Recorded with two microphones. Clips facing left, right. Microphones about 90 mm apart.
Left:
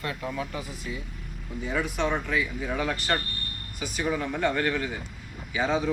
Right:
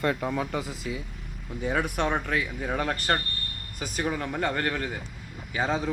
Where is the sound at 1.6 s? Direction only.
55° right (ahead or behind).